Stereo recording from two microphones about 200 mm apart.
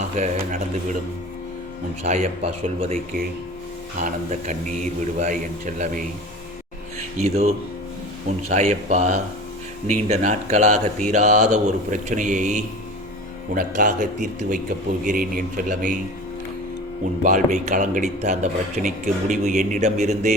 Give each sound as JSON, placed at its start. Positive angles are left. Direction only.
{"t": 0.0, "sound": "speech", "side_deg": -35}
{"t": 2.0, "sound": "speech", "side_deg": -30}
{"t": 7.2, "sound": "speech", "side_deg": -30}
{"t": 17.2, "sound": "speech", "side_deg": -35}